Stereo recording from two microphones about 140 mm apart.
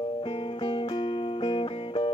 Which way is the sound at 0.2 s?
35° left (ahead or behind).